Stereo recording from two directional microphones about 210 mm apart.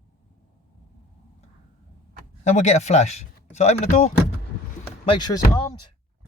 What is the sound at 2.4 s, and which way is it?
Speech, 35° left (ahead or behind).